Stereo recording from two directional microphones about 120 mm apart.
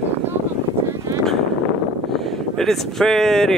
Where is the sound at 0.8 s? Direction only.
25° right (ahead or behind).